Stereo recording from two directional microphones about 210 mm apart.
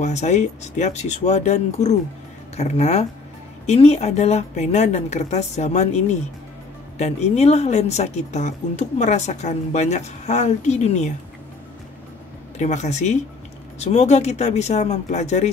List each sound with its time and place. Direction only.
0.0 s a woman's voice: 35° left (ahead or behind)
12.5 s a woman's voice: 35° left (ahead or behind)